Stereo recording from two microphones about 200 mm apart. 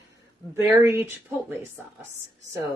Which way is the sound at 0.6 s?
15° right (ahead or behind).